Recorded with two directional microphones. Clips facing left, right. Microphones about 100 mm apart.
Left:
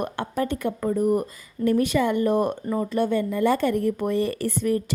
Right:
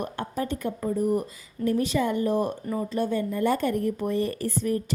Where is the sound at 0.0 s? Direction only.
65° left (ahead or behind).